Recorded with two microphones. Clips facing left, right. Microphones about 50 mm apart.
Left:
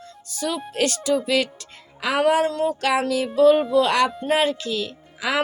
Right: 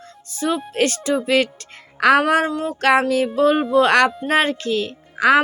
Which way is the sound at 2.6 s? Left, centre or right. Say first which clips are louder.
Right 4 dB; right.